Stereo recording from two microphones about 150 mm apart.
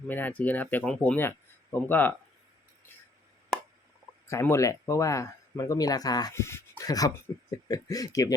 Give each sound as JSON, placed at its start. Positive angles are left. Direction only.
{"t": 0.1, "sound": "speech", "side_deg": 10}
{"t": 4.3, "sound": "speech", "side_deg": 20}